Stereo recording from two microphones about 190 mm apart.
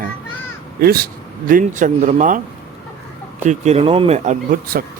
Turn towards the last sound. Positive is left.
turn(degrees=-45)  # may be behind; listen again after turning